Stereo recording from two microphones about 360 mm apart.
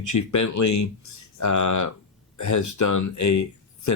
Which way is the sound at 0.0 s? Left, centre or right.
Left.